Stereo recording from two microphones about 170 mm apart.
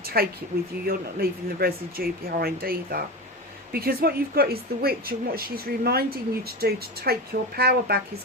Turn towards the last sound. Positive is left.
turn(degrees=-65)  # may be behind; listen again after turning